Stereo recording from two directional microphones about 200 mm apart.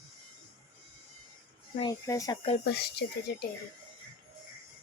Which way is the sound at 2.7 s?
55° left (ahead or behind).